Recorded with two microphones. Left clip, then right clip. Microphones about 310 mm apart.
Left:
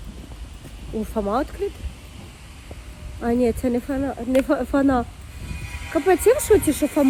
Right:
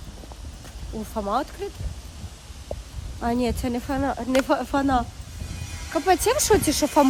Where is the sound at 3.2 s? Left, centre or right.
Centre.